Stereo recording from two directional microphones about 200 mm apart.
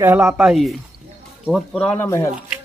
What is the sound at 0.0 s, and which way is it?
Speech, 10° right (ahead or behind).